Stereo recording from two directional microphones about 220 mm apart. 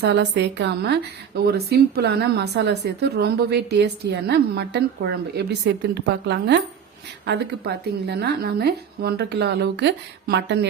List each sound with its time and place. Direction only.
0.0 s a woman's voice: 50° right (ahead or behind)